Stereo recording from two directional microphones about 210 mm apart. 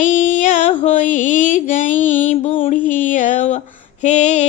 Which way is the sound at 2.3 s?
35° left (ahead or behind).